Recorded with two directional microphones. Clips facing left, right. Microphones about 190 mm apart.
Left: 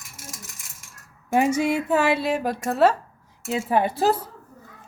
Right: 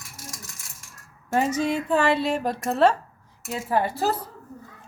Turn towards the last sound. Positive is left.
turn(degrees=20)  # may be behind; listen again after turning